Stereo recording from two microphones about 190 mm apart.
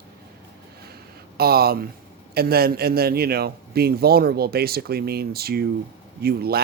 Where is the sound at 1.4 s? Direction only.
55° right (ahead or behind).